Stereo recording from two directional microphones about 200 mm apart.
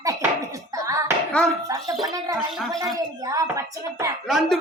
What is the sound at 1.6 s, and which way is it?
Speech, 15° right (ahead or behind).